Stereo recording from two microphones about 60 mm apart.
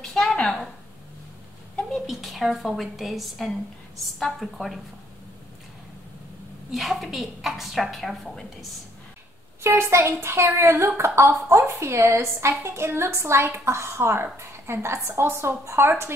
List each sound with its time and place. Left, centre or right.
0.0 s a sound: centre
2.0 s a woman's voice: centre
6.7 s a woman's voice: centre
9.6 s a woman's voice: right